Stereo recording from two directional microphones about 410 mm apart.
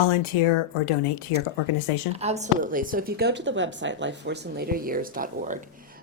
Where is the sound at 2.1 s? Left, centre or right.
Centre.